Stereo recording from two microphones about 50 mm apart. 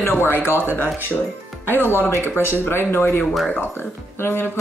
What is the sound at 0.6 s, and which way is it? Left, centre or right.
Speech, left.